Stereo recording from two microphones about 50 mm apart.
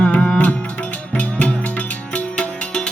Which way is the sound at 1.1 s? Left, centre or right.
Left.